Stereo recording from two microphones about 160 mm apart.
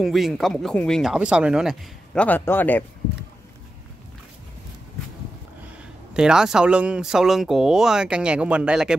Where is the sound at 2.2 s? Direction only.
10° left (ahead or behind).